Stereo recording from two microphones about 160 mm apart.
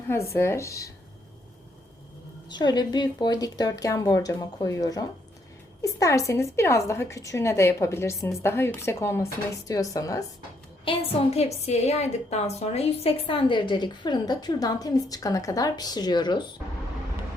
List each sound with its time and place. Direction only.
0.3 s a woman's voice: 15° left (ahead or behind)
2.5 s a woman's voice: 25° left (ahead or behind)
10.8 s a woman's voice: 40° left (ahead or behind)